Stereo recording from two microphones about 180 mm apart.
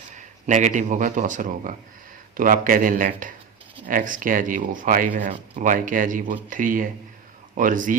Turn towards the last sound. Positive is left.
turn(degrees=-45)  # may be behind; listen again after turning